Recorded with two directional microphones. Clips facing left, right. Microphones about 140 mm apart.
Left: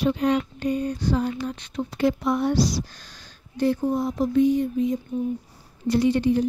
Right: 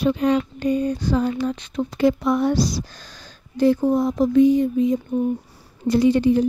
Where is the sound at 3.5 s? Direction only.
90° right.